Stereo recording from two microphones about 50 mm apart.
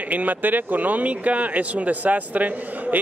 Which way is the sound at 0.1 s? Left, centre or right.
Right.